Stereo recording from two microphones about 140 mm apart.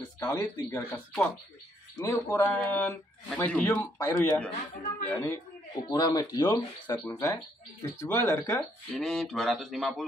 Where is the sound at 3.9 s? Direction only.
20° left (ahead or behind).